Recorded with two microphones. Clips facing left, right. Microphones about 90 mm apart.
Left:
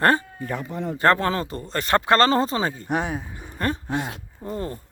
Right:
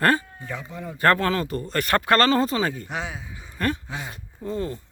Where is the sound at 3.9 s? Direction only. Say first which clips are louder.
Left 7 dB; 60° left (ahead or behind).